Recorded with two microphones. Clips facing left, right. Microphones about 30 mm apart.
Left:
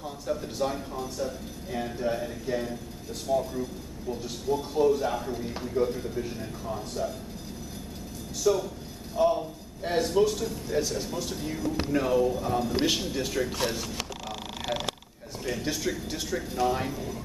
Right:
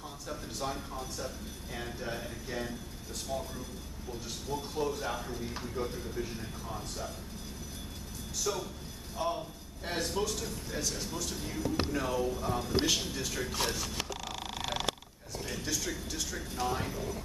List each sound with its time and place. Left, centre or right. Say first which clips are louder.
0.3 s a man's voice: left 8 dB; centre
8.5 s a man's voice: left 11 dB; centre
15.6 s a man's voice: left 4 dB; left